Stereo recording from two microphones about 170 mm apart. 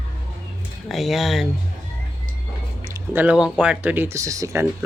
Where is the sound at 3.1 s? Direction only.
10° right (ahead or behind).